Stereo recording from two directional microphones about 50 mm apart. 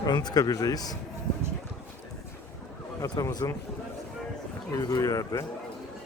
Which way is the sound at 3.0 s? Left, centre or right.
Left.